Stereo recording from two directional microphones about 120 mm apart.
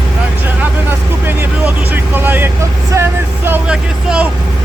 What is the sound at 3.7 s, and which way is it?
Speech, 10° right (ahead or behind).